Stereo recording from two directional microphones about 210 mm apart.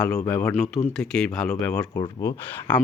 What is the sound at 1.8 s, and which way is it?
Speech, 15° left (ahead or behind).